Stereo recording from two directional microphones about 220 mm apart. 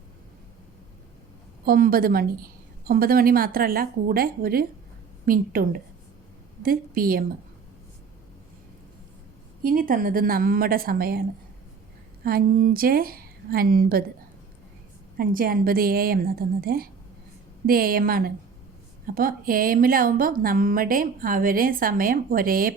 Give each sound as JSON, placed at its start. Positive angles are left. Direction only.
{"t": 1.6, "sound": "a woman's voice", "side_deg": -40}
{"t": 9.6, "sound": "a woman's voice", "side_deg": -40}
{"t": 15.2, "sound": "a woman's voice", "side_deg": -40}